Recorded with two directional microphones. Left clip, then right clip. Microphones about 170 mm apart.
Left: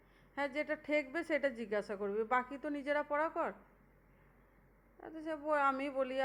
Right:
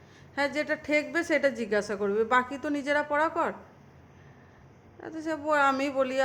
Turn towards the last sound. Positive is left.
turn(degrees=15)  # may be behind; listen again after turning